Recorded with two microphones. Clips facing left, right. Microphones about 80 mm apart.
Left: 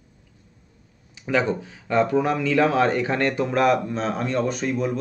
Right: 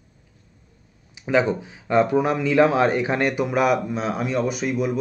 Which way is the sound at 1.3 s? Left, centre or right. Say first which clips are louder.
Right 2 dB; centre.